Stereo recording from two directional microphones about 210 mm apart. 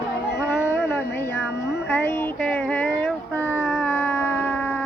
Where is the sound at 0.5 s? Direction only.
10° left (ahead or behind).